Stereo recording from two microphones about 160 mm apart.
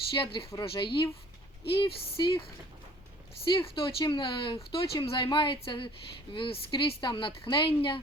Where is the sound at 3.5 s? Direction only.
30° left (ahead or behind).